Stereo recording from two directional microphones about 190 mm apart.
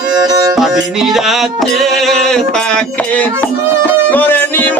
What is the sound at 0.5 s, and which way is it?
Music, centre (ahead or behind).